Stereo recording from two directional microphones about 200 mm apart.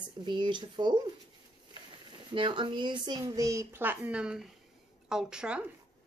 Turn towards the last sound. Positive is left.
turn(degrees=-5)  # may be behind; listen again after turning